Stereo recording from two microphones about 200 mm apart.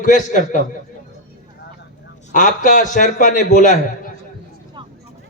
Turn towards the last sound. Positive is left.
turn(degrees=-25)  # may be behind; listen again after turning